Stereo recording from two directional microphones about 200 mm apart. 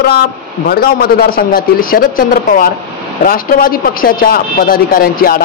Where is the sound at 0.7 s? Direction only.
50° left (ahead or behind).